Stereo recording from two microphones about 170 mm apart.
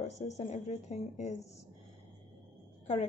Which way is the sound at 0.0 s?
40° left (ahead or behind).